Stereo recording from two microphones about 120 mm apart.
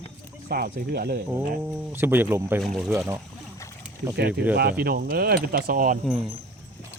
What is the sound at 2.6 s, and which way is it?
Speech, centre (ahead or behind).